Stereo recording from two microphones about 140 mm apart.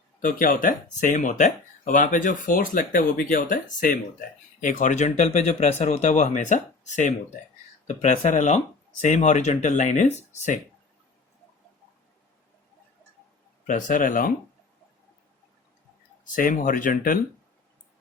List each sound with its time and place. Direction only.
0.2 s speech: 80° left; by 10.6 s 60° left (ahead or behind)
13.7 s speech: 65° left (ahead or behind)
16.2 s speech: 75° left (ahead or behind)